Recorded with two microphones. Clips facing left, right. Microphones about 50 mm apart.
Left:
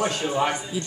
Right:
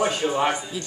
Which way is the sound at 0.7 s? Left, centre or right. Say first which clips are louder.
Left 2 dB; centre.